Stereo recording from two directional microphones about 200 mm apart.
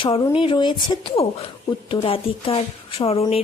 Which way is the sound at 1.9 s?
30° left (ahead or behind).